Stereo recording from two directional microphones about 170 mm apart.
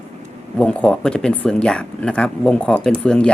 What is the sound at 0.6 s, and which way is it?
Speech, 5° left (ahead or behind).